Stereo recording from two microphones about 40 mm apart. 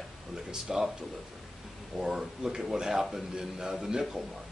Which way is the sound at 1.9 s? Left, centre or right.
Centre.